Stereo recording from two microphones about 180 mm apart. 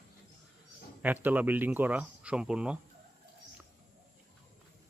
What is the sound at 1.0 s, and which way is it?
Speech, 10° right (ahead or behind).